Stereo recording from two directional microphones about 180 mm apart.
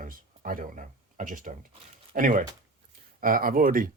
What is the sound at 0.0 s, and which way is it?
Speech, 50° right (ahead or behind).